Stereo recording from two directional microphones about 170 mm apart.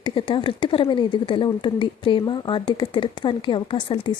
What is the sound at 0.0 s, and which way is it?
Speech, 30° left (ahead or behind).